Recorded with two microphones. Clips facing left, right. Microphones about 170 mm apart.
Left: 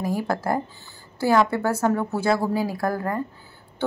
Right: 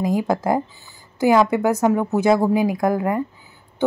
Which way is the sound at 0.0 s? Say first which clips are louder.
Right 5 dB; 15° right (ahead or behind).